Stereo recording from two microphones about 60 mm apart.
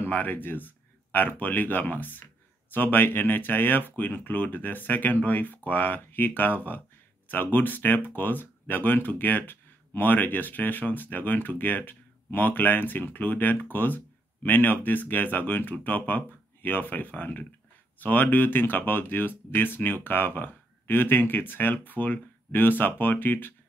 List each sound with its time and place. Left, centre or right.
0.1 s speech: left